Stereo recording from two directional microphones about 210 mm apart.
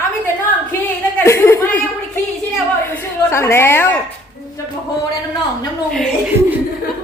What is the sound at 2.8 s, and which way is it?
Speech, 10° left (ahead or behind).